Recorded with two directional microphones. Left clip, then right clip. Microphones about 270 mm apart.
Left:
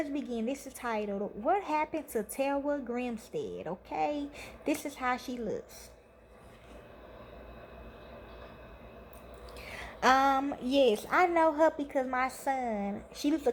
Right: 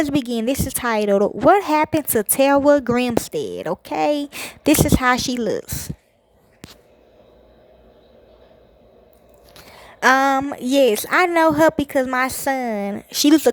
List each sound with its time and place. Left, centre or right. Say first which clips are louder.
0.0 s speech: right 14 dB; right
10.0 s speech: right 10 dB; right